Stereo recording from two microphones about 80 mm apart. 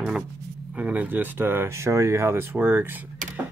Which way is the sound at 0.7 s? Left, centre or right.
Centre.